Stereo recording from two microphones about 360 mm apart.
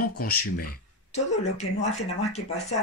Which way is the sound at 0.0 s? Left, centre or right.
Left.